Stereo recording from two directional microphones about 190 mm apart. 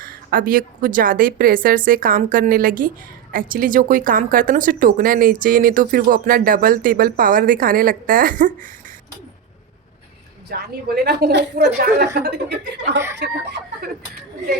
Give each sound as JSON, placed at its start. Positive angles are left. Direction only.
{"t": 0.0, "sound": "speech", "side_deg": -50}
{"t": 10.5, "sound": "a woman's voice", "side_deg": -55}